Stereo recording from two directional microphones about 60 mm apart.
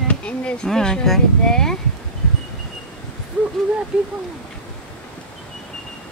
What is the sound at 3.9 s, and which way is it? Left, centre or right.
Speech, centre.